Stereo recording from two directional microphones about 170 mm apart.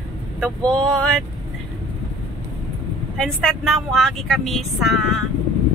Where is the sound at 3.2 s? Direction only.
5° left (ahead or behind).